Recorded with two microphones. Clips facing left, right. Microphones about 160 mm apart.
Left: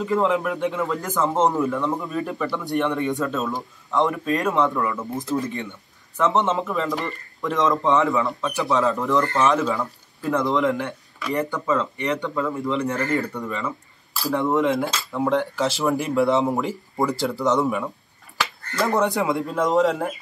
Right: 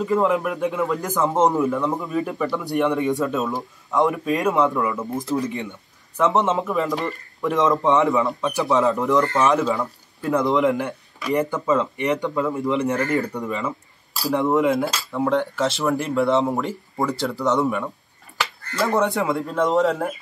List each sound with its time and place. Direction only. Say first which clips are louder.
0.0 s speech: right 1 dB; centre (ahead or behind)
7.8 s speech: right 2 dB; 20° right (ahead or behind)
9.4 s speech: right 1 dB; centre (ahead or behind)
11.2 s speech: right 3 dB; 20° right (ahead or behind); by 13.1 s centre (ahead or behind)
13.3 s speech: right 2 dB; 10° right (ahead or behind)